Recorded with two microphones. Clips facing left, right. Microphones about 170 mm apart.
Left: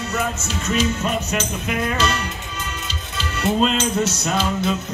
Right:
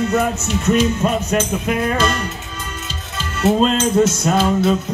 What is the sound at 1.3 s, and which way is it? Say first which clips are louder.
Speech: right 6 dB; 50° right (ahead or behind).